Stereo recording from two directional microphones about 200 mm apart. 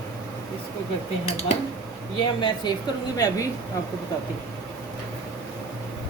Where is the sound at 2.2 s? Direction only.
20° left (ahead or behind).